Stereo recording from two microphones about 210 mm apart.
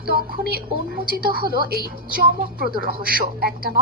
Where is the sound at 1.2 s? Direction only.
45° right (ahead or behind).